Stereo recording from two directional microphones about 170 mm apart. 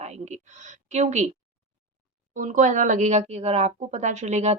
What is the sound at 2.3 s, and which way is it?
Speech, 50° right (ahead or behind).